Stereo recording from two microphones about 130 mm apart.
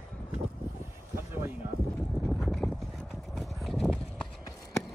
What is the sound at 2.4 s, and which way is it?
Clip-clop, centre (ahead or behind).